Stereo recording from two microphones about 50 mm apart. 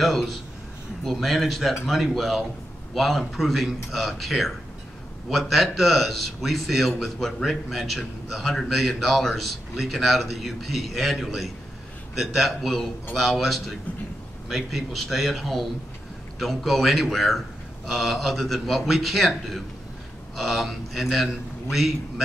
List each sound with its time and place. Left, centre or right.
0.0 s a man's voice: centre